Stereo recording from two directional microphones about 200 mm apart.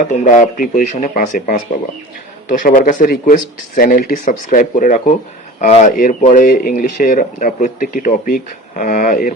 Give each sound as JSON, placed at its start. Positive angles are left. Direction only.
{"t": 0.1, "sound": "speech", "side_deg": 40}